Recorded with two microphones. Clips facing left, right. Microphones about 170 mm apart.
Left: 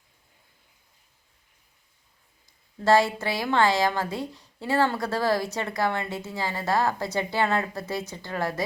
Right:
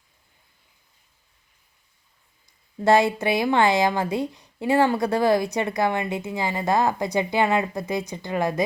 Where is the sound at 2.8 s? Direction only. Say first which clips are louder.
Right 3 dB; 20° right (ahead or behind).